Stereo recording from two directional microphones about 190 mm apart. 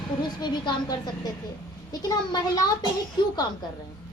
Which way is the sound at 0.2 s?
25° left (ahead or behind).